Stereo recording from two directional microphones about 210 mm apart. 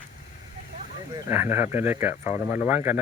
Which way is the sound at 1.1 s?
10° right (ahead or behind).